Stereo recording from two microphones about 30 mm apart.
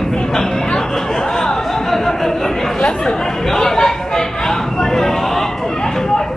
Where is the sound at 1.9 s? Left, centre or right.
Centre.